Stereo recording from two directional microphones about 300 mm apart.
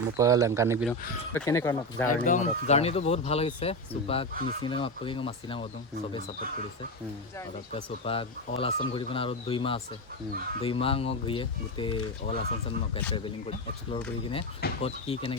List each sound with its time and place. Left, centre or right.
0.2 s speech: centre
1.3 s speech: centre
2.0 s speech: left
7.7 s speech: centre
14.8 s speech: centre